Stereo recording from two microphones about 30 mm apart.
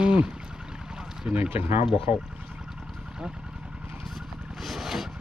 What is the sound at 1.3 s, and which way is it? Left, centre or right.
Speech, right.